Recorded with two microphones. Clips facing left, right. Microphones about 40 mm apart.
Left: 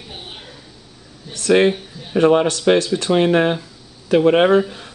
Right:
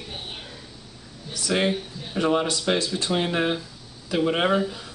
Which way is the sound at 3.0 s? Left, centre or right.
Left.